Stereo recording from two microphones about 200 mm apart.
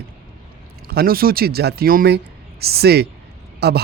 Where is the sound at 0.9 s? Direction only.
50° right (ahead or behind).